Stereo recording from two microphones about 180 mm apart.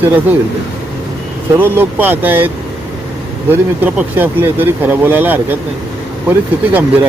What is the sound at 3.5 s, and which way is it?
Speech, 10° right (ahead or behind).